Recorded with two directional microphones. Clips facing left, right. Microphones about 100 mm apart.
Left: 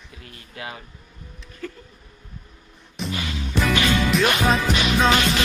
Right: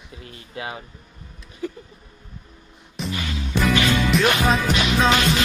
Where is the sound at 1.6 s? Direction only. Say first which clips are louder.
Right 4 dB; 15° right (ahead or behind).